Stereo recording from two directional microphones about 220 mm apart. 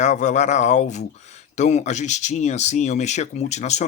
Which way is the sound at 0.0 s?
35° left (ahead or behind).